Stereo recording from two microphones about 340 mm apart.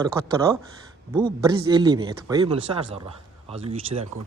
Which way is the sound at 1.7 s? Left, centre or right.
Centre.